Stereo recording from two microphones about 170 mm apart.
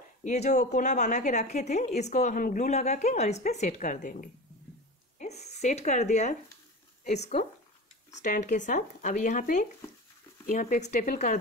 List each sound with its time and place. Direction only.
0.2 s a woman's voice: 45° left (ahead or behind)